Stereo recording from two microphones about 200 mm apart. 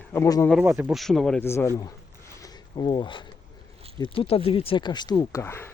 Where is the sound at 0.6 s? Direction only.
10° right (ahead or behind).